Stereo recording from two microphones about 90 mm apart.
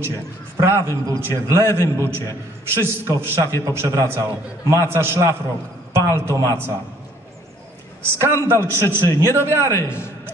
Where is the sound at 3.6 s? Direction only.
30° right (ahead or behind).